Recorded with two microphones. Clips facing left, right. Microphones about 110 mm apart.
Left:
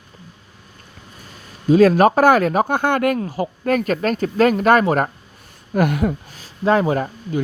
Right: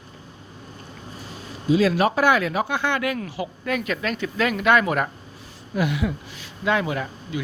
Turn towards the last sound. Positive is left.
turn(degrees=40)  # may be behind; listen again after turning